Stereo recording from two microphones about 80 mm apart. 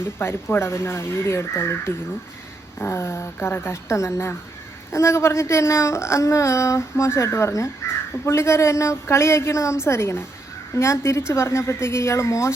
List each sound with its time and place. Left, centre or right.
0.2 s a woman's voice: left